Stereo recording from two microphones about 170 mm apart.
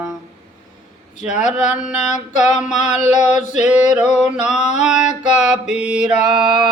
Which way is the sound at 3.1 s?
45° left (ahead or behind).